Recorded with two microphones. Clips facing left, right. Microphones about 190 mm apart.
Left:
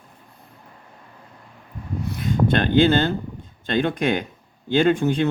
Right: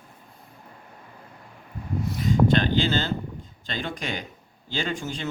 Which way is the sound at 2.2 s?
55° left (ahead or behind).